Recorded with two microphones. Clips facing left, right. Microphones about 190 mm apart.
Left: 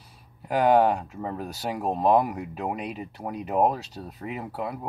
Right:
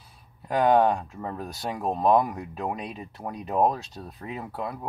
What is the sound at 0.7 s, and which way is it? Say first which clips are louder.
Speech: left 1 dB; 5° left (ahead or behind).